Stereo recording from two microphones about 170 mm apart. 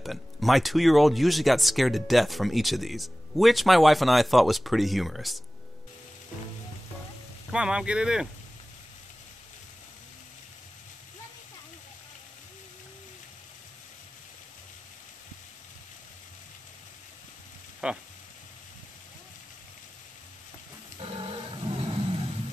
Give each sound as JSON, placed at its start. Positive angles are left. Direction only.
{"t": 0.0, "sound": "speech", "side_deg": 0}
{"t": 7.5, "sound": "speech", "side_deg": -5}
{"t": 17.8, "sound": "speech", "side_deg": -5}
{"t": 21.0, "sound": "dog", "side_deg": -30}